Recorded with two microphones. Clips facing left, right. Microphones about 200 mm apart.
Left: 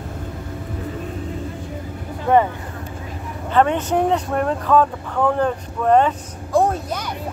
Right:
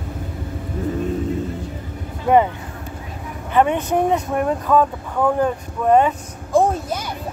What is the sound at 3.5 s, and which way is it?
Speech, 15° right (ahead or behind).